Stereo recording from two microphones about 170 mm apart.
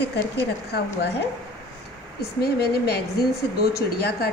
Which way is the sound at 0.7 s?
75° left (ahead or behind).